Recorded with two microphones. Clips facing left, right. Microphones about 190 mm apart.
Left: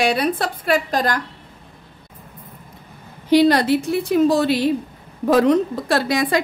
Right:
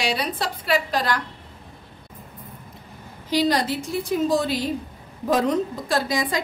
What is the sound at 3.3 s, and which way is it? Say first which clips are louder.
A woman's voice: left 7 dB; 60° left (ahead or behind).